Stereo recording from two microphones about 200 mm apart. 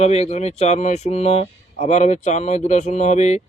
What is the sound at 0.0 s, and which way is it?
Speech, 35° left (ahead or behind).